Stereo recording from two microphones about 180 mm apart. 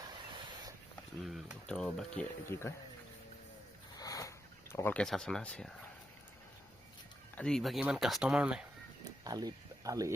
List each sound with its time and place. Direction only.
0.1 s fowl: 25° right (ahead or behind)
1.2 s speech: centre (ahead or behind)
3.9 s a sound: 20° left (ahead or behind)
7.3 s speech: 5° left (ahead or behind)
9.2 s speech: 20° right (ahead or behind)